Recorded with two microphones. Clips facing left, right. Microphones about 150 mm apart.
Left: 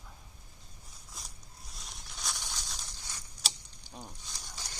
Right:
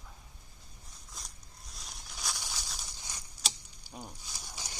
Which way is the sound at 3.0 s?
15° right (ahead or behind).